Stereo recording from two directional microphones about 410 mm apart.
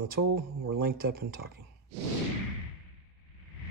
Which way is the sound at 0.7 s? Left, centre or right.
Right.